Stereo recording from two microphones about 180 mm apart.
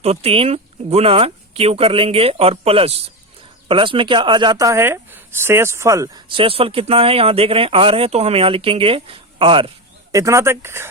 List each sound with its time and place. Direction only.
0.0 s speech: 35° right (ahead or behind)
10.1 s speech: 15° right (ahead or behind)